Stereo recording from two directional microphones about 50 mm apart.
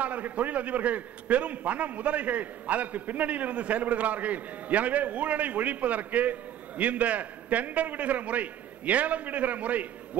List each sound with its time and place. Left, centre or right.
0.0 s a man's voice: right